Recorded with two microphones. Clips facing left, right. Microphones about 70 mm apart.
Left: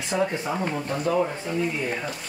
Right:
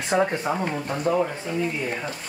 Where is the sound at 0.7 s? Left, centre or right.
Centre.